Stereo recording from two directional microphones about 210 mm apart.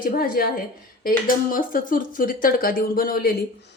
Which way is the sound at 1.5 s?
40° left (ahead or behind).